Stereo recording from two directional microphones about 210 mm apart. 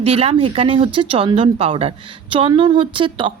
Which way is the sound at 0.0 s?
30° right (ahead or behind).